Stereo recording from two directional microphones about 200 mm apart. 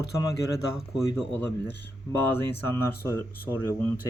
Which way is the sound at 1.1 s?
10° left (ahead or behind).